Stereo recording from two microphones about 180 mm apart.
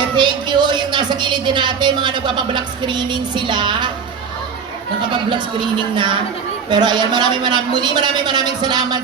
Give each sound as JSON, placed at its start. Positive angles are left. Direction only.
{"t": 0.2, "sound": "a woman's voice", "side_deg": -25}
{"t": 5.1, "sound": "a woman's voice", "side_deg": -25}